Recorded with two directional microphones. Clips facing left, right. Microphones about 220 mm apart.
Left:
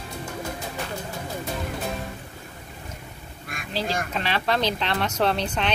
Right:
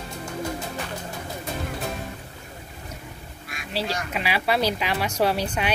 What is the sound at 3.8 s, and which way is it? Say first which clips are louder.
Speech: left 3 dB; 50° left (ahead or behind).